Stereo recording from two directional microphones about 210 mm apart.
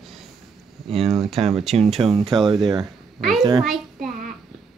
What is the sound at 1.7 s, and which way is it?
Speech, 30° right (ahead or behind).